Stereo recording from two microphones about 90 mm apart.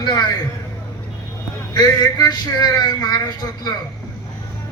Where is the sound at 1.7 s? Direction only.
50° left (ahead or behind).